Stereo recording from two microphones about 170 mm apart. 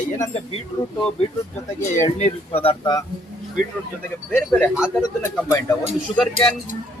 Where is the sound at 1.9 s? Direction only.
45° left (ahead or behind).